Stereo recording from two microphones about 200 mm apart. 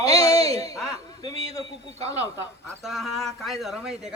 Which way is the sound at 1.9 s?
30° right (ahead or behind).